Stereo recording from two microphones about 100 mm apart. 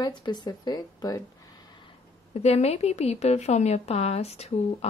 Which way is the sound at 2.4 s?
90° left.